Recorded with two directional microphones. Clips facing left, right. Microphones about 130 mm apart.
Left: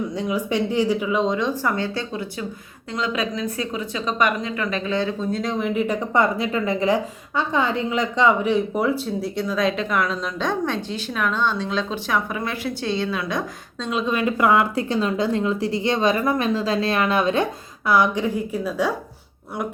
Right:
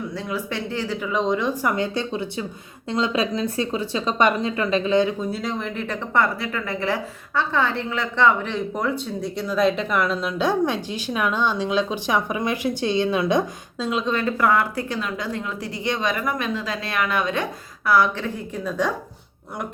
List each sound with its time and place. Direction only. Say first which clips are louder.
0.1 s speech: left 5 dB; 20° left (ahead or behind)
1.6 s speech: right 1 dB; 15° right (ahead or behind)
5.3 s speech: left 4 dB; centre (ahead or behind); by 13.4 s 20° right (ahead or behind)
13.7 s a woman's voice: right 1 dB; 5° right (ahead or behind)
14.0 s speech: left 3 dB; 10° left (ahead or behind); by 17.4 s 30° left (ahead or behind)
17.8 s speech: left 1 dB; 20° left (ahead or behind)